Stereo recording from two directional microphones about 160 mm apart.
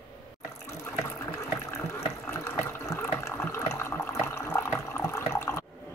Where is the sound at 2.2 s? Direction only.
20° left (ahead or behind).